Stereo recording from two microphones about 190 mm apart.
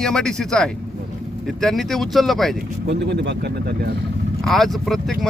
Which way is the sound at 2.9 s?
65° right (ahead or behind).